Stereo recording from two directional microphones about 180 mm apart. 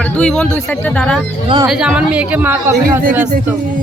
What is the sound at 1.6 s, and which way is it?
A woman's voice, 5° right (ahead or behind).